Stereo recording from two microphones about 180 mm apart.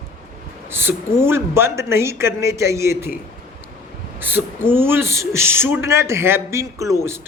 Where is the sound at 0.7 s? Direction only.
10° right (ahead or behind).